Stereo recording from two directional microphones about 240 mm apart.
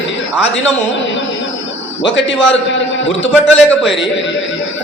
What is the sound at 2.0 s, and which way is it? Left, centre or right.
Speech, left.